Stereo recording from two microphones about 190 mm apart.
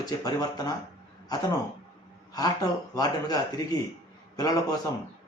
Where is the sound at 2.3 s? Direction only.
20° left (ahead or behind).